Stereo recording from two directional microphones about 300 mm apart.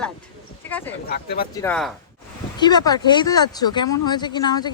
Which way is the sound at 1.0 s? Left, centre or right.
Left.